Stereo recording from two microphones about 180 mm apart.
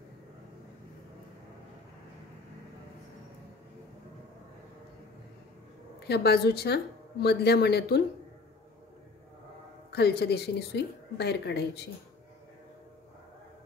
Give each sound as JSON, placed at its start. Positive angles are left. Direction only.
{"t": 5.9, "sound": "speech", "side_deg": 65}
{"t": 9.9, "sound": "a woman's voice", "side_deg": 65}